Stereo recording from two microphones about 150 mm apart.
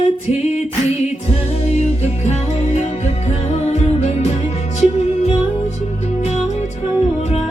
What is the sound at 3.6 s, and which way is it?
Music, 45° left (ahead or behind).